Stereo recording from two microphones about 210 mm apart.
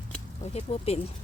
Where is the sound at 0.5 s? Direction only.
30° left (ahead or behind).